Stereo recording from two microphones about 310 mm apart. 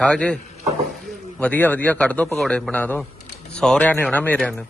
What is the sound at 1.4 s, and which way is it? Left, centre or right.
A man's voice, centre.